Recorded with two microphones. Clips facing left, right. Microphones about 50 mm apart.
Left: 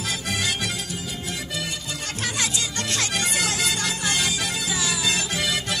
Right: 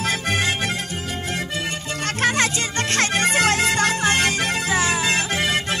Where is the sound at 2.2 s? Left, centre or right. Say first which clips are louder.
Right 7 dB; right.